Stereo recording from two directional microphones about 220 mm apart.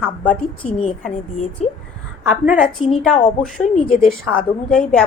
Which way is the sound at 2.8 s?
25° left (ahead or behind).